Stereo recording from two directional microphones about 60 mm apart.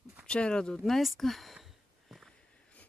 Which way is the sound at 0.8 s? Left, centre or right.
Centre.